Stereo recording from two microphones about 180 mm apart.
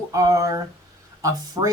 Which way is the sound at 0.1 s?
20° right (ahead or behind).